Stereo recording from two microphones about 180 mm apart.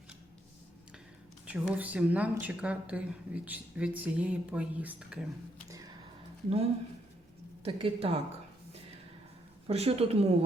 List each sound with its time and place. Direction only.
1.5 s a woman's voice: 5° right (ahead or behind)
5.6 s a sound: 20° right (ahead or behind)
7.6 s a woman's voice: 30° right (ahead or behind)
9.6 s a woman's voice: 35° right (ahead or behind)